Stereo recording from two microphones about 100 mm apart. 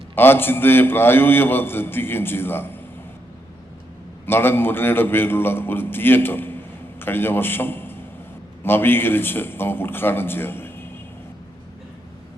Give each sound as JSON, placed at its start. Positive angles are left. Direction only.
{"t": 0.2, "sound": "a man's voice", "side_deg": 20}
{"t": 4.3, "sound": "a man's voice", "side_deg": 20}